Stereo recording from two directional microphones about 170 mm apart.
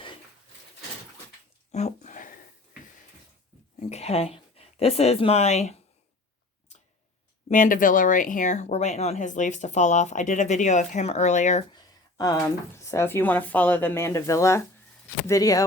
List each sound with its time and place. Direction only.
1.7 s a sound: 40° left (ahead or behind)
3.8 s speech: 40° left (ahead or behind)
7.5 s speech: 50° left (ahead or behind)
11.7 s speech: 20° left (ahead or behind)